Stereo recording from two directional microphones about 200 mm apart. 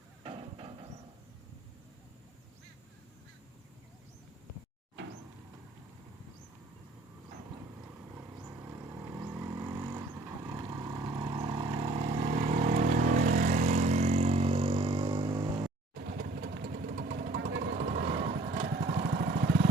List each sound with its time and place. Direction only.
0.3 s a sound: 30° right (ahead or behind)
8.4 s vehicle: 10° right (ahead or behind)
16.0 s vehicle: 45° right (ahead or behind)
17.7 s vehicle: 35° right (ahead or behind)
18.9 s vehicle: 45° right (ahead or behind)